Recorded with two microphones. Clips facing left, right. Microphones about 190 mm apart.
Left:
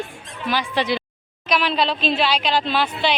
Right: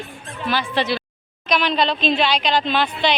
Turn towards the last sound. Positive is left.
turn(degrees=5)  # may be behind; listen again after turning